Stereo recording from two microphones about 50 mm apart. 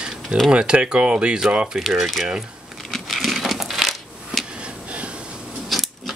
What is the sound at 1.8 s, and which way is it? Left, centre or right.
Speech, centre.